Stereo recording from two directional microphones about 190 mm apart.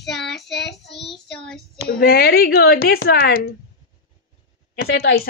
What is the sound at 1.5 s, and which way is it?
A woman's voice, 55° left (ahead or behind).